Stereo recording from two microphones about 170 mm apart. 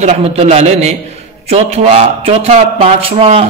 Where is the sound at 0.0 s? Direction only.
35° right (ahead or behind).